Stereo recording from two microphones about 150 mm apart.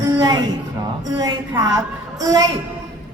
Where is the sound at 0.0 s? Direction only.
25° right (ahead or behind).